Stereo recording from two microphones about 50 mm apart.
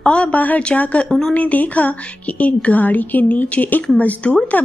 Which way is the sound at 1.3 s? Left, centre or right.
Left.